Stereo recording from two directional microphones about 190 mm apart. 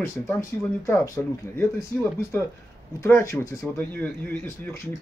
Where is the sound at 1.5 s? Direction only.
10° left (ahead or behind).